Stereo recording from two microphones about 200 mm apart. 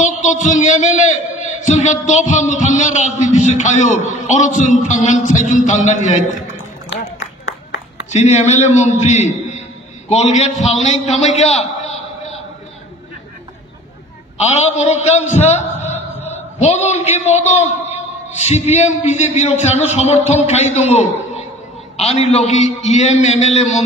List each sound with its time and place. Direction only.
0.0 s a man's voice: 40° left (ahead or behind)
6.9 s a sound: 60° left (ahead or behind)
8.1 s a man's voice: 35° left (ahead or behind)
10.5 s a man's voice: centre (ahead or behind)
10.8 s a man's voice: 35° left (ahead or behind)
14.4 s a man's voice: 35° left (ahead or behind)
21.9 s a man's voice: 30° left (ahead or behind)